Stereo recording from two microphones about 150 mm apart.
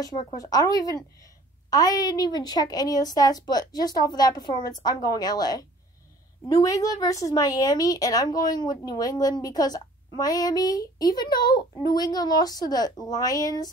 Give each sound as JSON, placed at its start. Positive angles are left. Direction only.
{"t": 0.4, "sound": "a woman's voice", "side_deg": 25}